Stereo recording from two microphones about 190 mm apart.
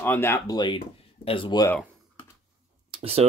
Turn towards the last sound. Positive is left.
turn(degrees=-30)  # may be behind; listen again after turning